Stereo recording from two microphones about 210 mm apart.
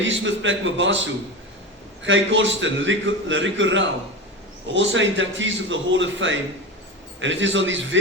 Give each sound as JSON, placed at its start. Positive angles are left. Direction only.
{"t": 0.3, "sound": "a man's voice", "side_deg": -65}